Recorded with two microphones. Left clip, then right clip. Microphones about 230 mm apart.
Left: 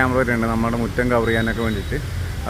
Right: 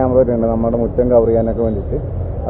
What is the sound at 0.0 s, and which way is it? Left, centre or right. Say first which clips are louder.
Speech: right 5 dB; left.